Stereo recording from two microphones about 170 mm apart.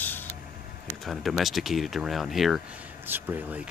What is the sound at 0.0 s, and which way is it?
Mechanisms, 10° left (ahead or behind).